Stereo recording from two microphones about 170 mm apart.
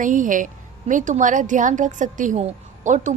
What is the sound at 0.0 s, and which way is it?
A woman's voice, 50° right (ahead or behind).